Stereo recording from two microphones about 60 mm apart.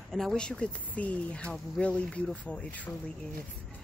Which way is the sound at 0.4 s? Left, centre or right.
Centre.